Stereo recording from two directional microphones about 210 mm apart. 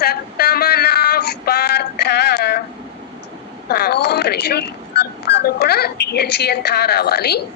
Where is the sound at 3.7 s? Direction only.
50° left (ahead or behind).